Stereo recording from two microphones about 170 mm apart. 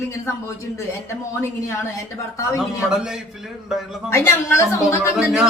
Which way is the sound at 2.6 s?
5° right (ahead or behind).